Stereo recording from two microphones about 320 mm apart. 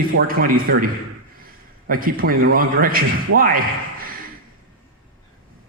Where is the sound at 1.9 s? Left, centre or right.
Right.